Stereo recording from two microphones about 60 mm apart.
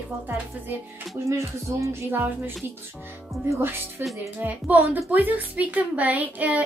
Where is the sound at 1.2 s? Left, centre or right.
Right.